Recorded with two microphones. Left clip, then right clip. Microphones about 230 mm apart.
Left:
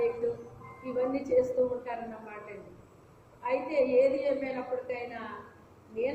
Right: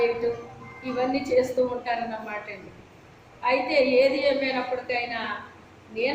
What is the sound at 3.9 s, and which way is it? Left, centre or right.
A woman's voice, centre.